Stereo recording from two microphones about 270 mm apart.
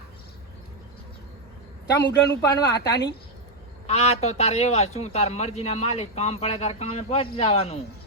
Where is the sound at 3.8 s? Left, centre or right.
Left.